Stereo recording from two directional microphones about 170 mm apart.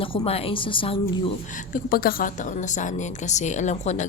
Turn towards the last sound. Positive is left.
turn(degrees=40)  # may be behind; listen again after turning